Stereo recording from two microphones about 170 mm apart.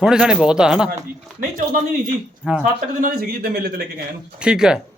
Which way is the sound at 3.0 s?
60° right (ahead or behind).